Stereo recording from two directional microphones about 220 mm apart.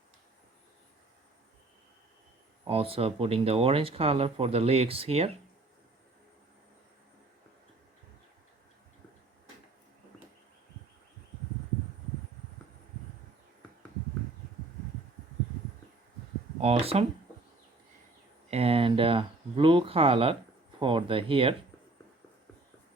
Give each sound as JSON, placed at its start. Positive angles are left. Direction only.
{"t": 2.6, "sound": "speech", "side_deg": -25}
{"t": 16.6, "sound": "speech", "side_deg": -25}
{"t": 18.5, "sound": "speech", "side_deg": -25}